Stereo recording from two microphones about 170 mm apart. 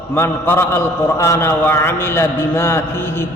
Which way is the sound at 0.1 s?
15° left (ahead or behind).